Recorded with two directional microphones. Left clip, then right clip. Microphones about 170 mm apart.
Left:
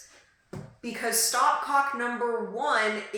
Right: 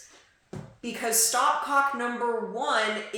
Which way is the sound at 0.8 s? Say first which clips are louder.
Right 1 dB; 15° right (ahead or behind).